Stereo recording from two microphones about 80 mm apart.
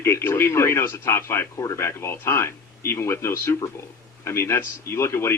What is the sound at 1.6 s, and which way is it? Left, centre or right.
Speech, left.